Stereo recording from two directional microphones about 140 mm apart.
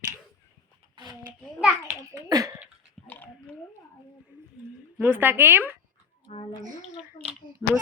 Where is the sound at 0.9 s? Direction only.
30° right (ahead or behind).